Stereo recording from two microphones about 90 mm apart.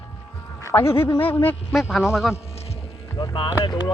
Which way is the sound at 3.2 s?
90° left.